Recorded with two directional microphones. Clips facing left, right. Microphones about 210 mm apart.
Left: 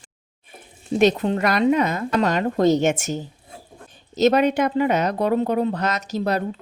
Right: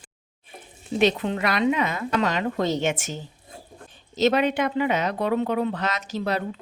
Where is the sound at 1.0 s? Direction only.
45° left (ahead or behind).